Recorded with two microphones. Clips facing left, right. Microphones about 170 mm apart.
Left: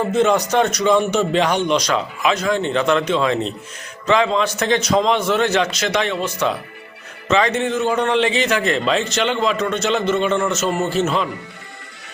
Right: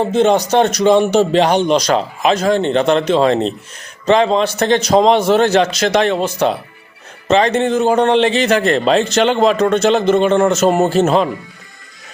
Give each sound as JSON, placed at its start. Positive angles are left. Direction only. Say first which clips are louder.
{"t": 0.0, "sound": "a man's voice", "louder": "right 4 dB", "side_deg": -30}